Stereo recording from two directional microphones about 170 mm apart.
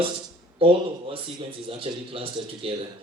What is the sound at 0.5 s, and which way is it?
Speech, 35° right (ahead or behind).